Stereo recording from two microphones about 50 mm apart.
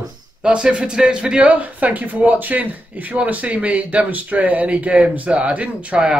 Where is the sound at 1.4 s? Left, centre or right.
Right.